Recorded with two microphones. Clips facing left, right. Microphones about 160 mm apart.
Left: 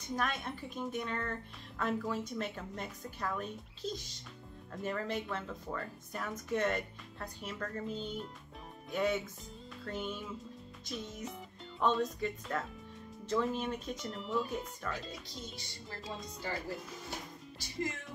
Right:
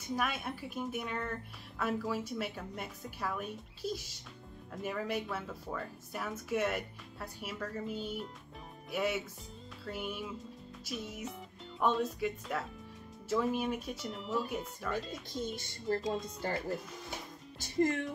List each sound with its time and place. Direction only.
0.1 s speech: 10° right (ahead or behind)
15.4 s speech: 50° right (ahead or behind)